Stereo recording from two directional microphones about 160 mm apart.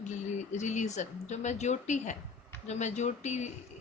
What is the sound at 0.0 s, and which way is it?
Speech, 50° left (ahead or behind).